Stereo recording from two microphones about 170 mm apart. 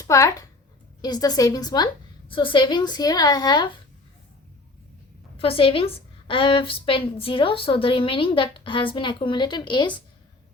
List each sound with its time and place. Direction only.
0.0 s a woman's voice: 20° left (ahead or behind)
5.4 s a woman's voice: 35° left (ahead or behind)